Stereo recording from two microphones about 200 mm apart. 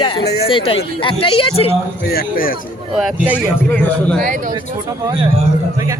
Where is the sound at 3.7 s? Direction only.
10° left (ahead or behind).